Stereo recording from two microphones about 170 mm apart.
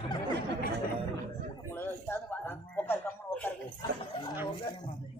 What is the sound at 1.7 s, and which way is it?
A man's voice, 15° left (ahead or behind).